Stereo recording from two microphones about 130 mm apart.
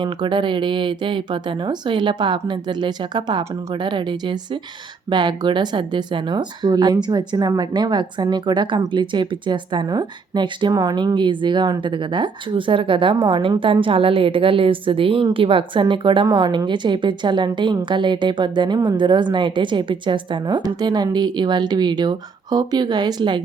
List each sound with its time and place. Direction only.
0.0 s speech: 35° right (ahead or behind)